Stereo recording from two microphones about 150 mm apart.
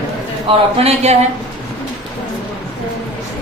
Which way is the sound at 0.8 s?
45° right (ahead or behind).